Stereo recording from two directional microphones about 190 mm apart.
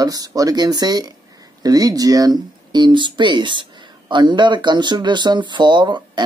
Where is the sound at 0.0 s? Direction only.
20° right (ahead or behind).